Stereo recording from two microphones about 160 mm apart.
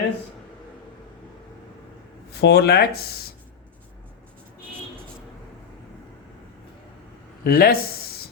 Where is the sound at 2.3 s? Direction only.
90° left.